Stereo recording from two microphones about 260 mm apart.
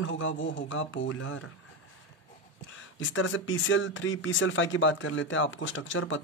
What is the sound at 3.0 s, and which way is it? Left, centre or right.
Speech, left.